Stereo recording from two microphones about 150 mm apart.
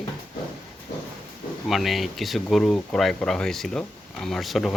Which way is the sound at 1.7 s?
Centre (ahead or behind).